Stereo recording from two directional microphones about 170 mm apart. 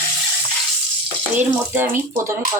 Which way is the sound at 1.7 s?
10° right (ahead or behind).